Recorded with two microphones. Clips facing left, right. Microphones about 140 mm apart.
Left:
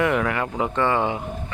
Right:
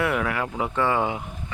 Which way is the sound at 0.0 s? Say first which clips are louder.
Left 3 dB; 5° right (ahead or behind).